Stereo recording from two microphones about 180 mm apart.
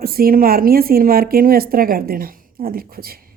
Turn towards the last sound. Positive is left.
turn(degrees=-55)  # may be behind; listen again after turning